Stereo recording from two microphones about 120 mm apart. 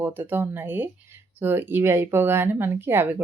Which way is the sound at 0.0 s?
15° right (ahead or behind).